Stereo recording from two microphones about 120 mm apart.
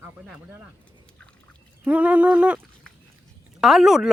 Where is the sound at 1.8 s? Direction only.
10° right (ahead or behind).